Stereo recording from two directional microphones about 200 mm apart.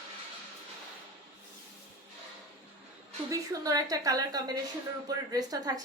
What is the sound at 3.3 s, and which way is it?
Speech, 15° right (ahead or behind).